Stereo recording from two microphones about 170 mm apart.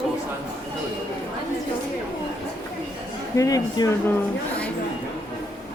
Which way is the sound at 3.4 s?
20° left (ahead or behind).